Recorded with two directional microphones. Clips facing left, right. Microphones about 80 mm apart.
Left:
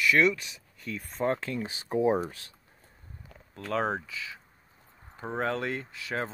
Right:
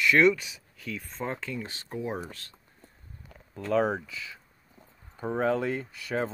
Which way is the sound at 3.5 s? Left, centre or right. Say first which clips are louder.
Right 4 dB; centre.